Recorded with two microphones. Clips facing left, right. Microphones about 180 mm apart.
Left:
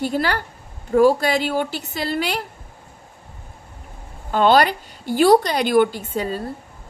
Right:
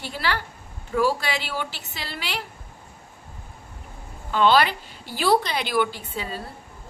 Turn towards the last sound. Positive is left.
turn(degrees=45)  # may be behind; listen again after turning